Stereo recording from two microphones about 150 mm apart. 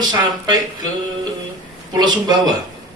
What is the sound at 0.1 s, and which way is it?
Speech, 30° right (ahead or behind).